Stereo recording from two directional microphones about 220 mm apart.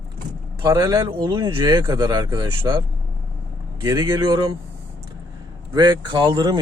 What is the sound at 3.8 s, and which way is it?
Speech, 15° right (ahead or behind).